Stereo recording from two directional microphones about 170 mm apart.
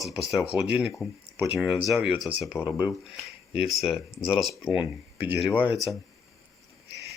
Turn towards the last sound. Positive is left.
turn(degrees=-5)  # may be behind; listen again after turning